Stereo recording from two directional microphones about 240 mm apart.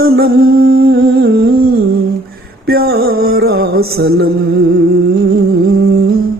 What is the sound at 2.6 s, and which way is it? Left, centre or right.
Music, right.